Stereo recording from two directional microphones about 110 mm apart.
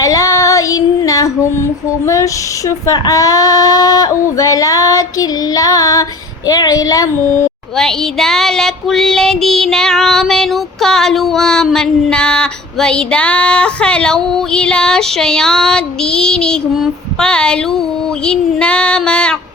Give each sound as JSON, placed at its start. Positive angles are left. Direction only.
{"t": 0.0, "sound": "female singing", "side_deg": 30}
{"t": 7.8, "sound": "child singing", "side_deg": 5}